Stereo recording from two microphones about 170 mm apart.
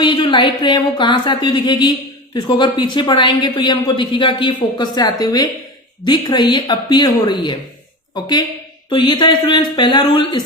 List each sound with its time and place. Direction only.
0.0 s a man's voice: 25° left (ahead or behind)